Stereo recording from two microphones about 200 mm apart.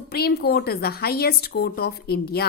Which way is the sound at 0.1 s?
50° left (ahead or behind).